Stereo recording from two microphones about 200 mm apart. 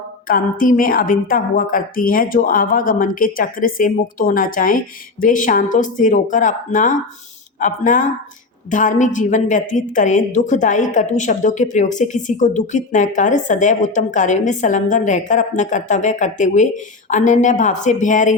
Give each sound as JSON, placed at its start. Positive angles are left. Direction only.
{"t": 0.3, "sound": "a woman's voice", "side_deg": 45}